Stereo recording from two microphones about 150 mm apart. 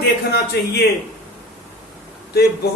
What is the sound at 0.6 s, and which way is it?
Speech, 90° left.